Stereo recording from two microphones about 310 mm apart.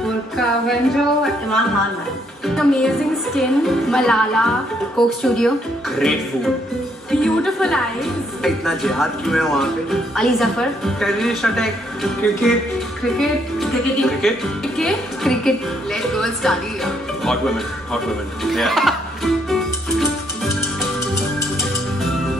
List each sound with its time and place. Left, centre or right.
0.4 s a woman's voice: centre
7.1 s a woman's voice: centre
18.4 s music: centre